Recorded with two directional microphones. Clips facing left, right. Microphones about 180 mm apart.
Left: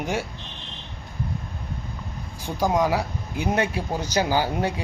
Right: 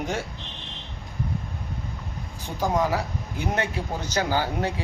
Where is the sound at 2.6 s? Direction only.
15° left (ahead or behind).